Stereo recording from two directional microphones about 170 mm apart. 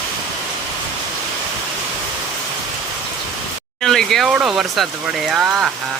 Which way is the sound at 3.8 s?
Centre (ahead or behind).